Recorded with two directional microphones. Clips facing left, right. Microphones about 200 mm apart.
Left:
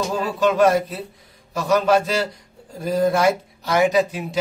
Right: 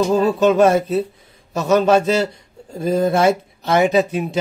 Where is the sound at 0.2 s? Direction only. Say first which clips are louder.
Right 1 dB; 25° right (ahead or behind).